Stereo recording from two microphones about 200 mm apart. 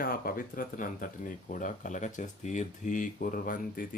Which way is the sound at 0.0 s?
45° left (ahead or behind).